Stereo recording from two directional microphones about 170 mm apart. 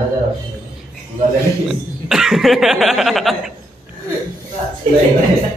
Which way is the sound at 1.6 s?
Centre (ahead or behind).